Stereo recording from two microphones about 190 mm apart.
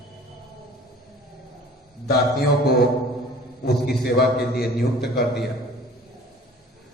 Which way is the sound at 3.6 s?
55° left (ahead or behind).